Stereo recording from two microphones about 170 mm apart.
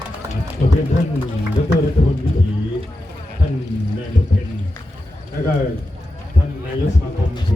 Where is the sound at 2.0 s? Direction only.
35° left (ahead or behind).